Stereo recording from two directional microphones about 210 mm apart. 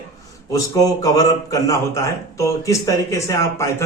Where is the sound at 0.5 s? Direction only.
15° left (ahead or behind).